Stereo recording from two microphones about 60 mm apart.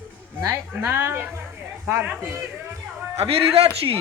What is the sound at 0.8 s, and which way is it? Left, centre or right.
Speech, right.